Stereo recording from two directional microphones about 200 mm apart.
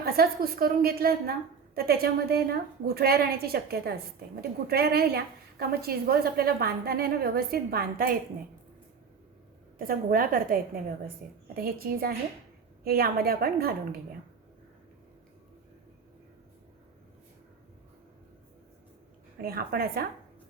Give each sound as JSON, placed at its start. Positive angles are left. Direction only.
{"t": 0.0, "sound": "a woman's voice", "side_deg": -50}
{"t": 9.7, "sound": "a woman's voice", "side_deg": -45}
{"t": 19.4, "sound": "a woman's voice", "side_deg": -50}